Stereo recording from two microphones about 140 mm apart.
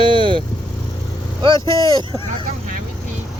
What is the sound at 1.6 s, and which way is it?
Speech, 35° right (ahead or behind).